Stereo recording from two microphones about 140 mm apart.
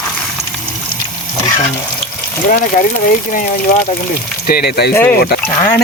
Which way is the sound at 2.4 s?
85° left.